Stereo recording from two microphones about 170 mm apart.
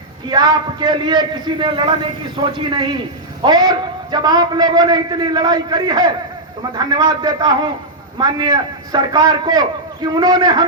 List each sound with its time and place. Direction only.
0.3 s a man's voice: 25° right (ahead or behind)